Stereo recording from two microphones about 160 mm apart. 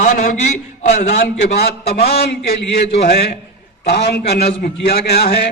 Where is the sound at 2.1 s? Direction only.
85° left.